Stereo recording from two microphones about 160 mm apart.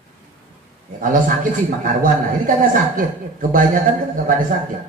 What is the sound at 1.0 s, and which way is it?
A man's voice, 55° right (ahead or behind).